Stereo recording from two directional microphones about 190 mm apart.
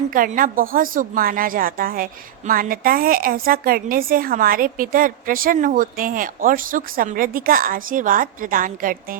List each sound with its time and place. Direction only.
0.1 s a woman's voice: 45° right (ahead or behind)